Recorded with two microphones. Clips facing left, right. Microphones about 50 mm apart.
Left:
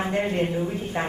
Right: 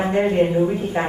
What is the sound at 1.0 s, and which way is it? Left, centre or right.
Speech, centre.